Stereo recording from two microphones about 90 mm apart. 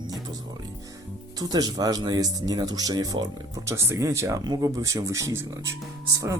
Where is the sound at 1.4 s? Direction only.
45° right (ahead or behind).